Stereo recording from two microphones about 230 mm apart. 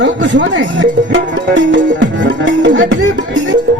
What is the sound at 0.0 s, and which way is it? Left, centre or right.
Speech, right.